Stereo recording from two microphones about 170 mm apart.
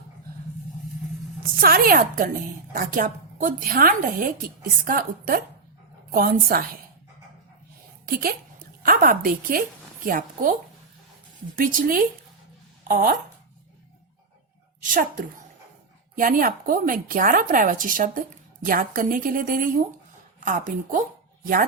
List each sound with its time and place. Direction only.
1.5 s speech: 60° right (ahead or behind)
8.0 s a woman's voice: 60° right (ahead or behind)
11.5 s speech: 55° right (ahead or behind)
14.8 s a woman's voice: 50° right (ahead or behind)